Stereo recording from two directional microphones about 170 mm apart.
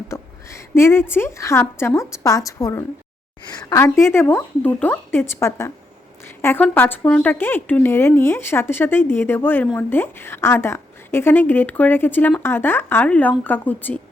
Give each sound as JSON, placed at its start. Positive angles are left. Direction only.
{"t": 0.1, "sound": "speech", "side_deg": 15}